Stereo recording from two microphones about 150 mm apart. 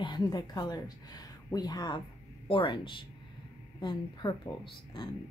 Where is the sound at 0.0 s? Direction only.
30° left (ahead or behind).